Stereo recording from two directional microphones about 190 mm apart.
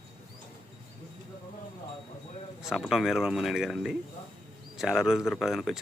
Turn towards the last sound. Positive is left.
turn(degrees=0)  # may be behind; listen again after turning